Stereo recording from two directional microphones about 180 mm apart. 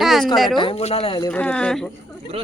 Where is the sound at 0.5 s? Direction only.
30° left (ahead or behind).